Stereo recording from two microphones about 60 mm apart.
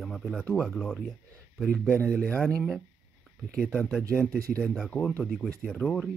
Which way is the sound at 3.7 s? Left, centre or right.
Centre.